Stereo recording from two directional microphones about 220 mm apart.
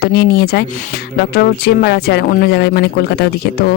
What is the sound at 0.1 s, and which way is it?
Speech, 50° left (ahead or behind).